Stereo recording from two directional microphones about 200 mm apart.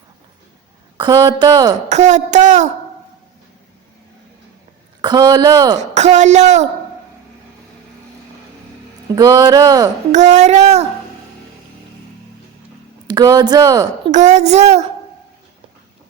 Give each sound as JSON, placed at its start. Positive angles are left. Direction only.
{"t": 0.9, "sound": "speech", "side_deg": -20}
{"t": 1.9, "sound": "speech", "side_deg": -35}
{"t": 5.0, "sound": "speech", "side_deg": -20}
{"t": 5.8, "sound": "speech", "side_deg": -35}
{"t": 9.1, "sound": "speech", "side_deg": -20}
{"t": 10.1, "sound": "speech", "side_deg": -35}
{"t": 13.1, "sound": "speech", "side_deg": -20}
{"t": 14.1, "sound": "speech", "side_deg": -35}